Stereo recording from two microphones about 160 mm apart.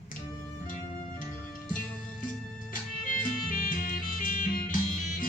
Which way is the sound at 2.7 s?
55° left (ahead or behind).